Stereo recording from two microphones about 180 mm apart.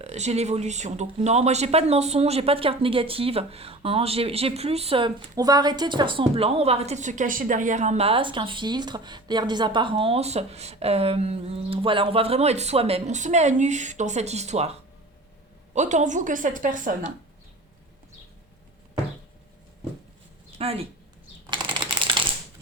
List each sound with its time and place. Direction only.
0.0 s a woman's voice: 40° right (ahead or behind)
20.6 s speech: 35° right (ahead or behind)
21.6 s typing: 5° right (ahead or behind)